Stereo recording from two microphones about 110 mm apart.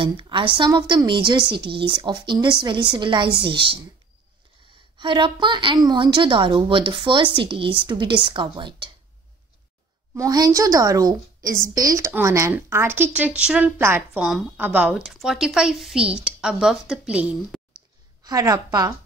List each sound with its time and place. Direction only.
0.0 s a woman's voice: 50° right (ahead or behind)
4.9 s a woman's voice: 50° right (ahead or behind)
10.1 s a woman's voice: 35° right (ahead or behind); by 17.4 s 10° right (ahead or behind)
18.2 s a woman's voice: 35° right (ahead or behind)